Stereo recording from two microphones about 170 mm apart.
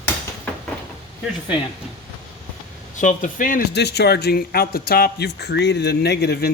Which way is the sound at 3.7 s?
80° left.